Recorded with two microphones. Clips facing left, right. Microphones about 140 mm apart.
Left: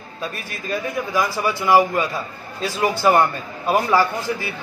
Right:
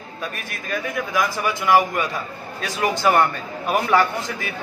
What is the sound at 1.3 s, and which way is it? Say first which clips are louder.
Speech: left 2 dB; 15° right (ahead or behind).